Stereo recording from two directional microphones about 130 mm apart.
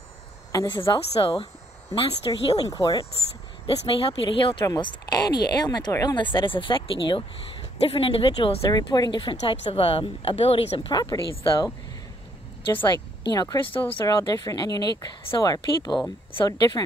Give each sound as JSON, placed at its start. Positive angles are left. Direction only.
{"t": 0.5, "sound": "a woman's voice", "side_deg": 25}
{"t": 1.2, "sound": "speech", "side_deg": 45}
{"t": 2.5, "sound": "speech", "side_deg": 25}
{"t": 3.6, "sound": "a woman's voice", "side_deg": 45}
{"t": 8.7, "sound": "a woman's voice", "side_deg": 30}
{"t": 12.7, "sound": "a woman's voice", "side_deg": 35}